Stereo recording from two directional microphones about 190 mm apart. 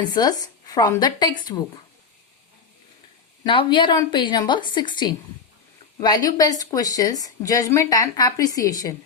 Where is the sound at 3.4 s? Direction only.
25° left (ahead or behind).